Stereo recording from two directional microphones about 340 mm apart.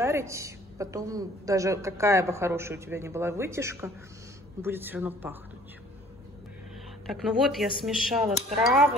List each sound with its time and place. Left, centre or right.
0.0 s a woman's voice: centre
7.1 s speech: centre